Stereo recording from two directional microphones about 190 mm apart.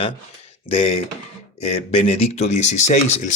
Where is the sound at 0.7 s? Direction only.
30° left (ahead or behind).